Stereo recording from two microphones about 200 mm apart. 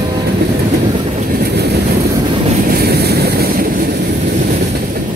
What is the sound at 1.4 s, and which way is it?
Vehicle, 55° right (ahead or behind).